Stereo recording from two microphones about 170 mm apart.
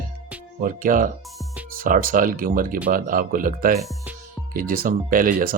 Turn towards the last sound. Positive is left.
turn(degrees=-55)  # may be behind; listen again after turning